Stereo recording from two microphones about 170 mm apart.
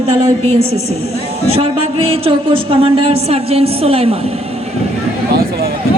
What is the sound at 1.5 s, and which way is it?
Speech, 35° right (ahead or behind).